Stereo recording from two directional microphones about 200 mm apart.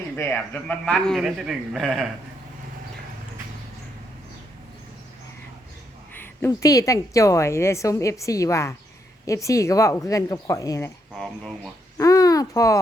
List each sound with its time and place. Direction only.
0.2 s a man's voice: 10° left (ahead or behind)
6.1 s a woman's voice: 15° left (ahead or behind)
11.1 s a man's voice: centre (ahead or behind)
11.9 s a sound: 15° left (ahead or behind)